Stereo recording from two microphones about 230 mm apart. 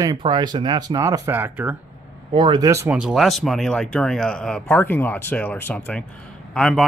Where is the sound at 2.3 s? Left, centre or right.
Centre.